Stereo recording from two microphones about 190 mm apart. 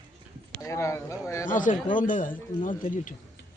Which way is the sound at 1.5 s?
45° left (ahead or behind).